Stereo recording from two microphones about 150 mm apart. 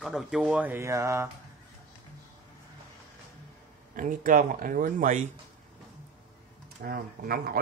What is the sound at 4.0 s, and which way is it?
Speech, 65° right (ahead or behind).